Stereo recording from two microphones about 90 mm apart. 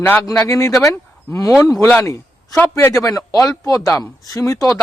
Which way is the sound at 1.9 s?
35° left (ahead or behind).